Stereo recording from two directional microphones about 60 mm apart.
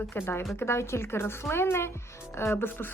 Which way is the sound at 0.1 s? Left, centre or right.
Left.